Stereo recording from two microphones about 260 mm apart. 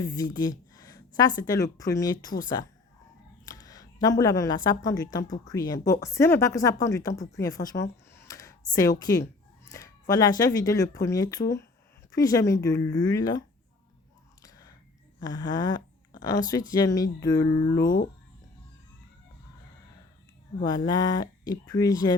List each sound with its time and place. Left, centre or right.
0.0 s speech: centre
8.1 s computer keyboard: centre
9.7 s speech: centre
14.4 s whispering: centre
15.2 s speech: centre
17.8 s speech: left
20.7 s speech: centre